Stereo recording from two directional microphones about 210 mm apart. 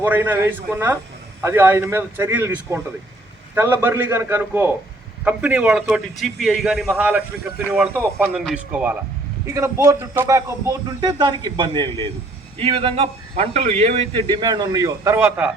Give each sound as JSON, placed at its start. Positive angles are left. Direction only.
{"t": 0.0, "sound": "a man's voice", "side_deg": -10}